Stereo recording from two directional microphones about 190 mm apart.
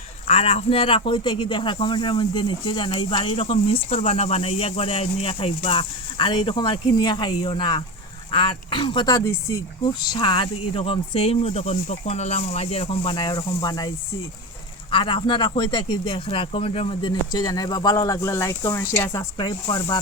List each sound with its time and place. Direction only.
0.3 s speech: 30° left (ahead or behind)